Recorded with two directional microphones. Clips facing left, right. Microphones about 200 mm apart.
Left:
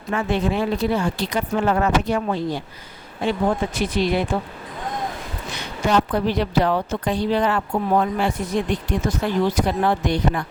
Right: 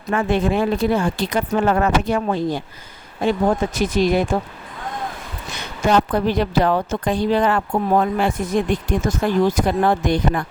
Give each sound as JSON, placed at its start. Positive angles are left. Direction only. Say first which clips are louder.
{"t": 0.1, "sound": "speech", "louder": "right 3 dB", "side_deg": -50}
{"t": 5.8, "sound": "speech", "louder": "right 2 dB", "side_deg": -50}